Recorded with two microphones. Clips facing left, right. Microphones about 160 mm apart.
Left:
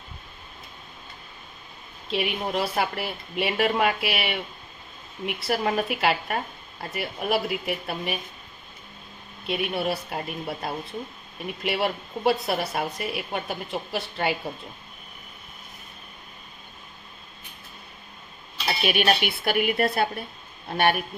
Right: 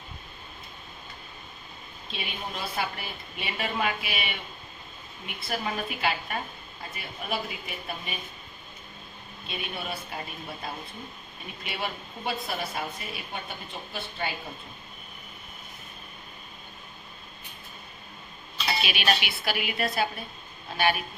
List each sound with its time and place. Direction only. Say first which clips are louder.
2.0 s a woman's voice: left 10 dB; 75° left (ahead or behind)
9.5 s a woman's voice: left 9 dB; 70° left (ahead or behind)
18.8 s a man's voice: left 7 dB; 50° left (ahead or behind)